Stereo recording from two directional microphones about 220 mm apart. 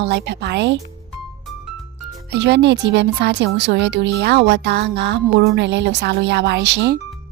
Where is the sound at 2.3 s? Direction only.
50° right (ahead or behind).